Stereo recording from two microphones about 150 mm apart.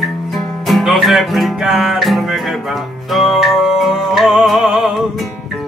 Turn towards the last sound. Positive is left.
turn(degrees=0)  # may be behind; listen again after turning